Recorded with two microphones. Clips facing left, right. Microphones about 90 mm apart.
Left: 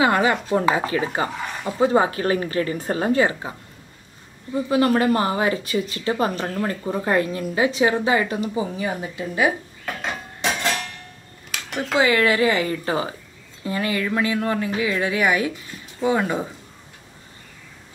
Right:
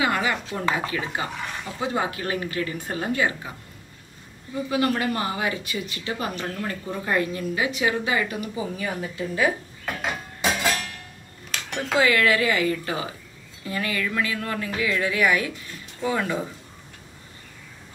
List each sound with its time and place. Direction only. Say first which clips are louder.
0.0 s a woman's voice: left 5 dB; 35° left (ahead or behind)
1.4 s a sound: left 3 dB; 10° left (ahead or behind)
1.8 s a woman's voice: left 9 dB; 35° left (ahead or behind)
4.6 s a woman's voice: left 6 dB; 35° left (ahead or behind)
9.8 s a sound: even; centre (ahead or behind)
12.0 s speech: left 2 dB; 25° left (ahead or behind)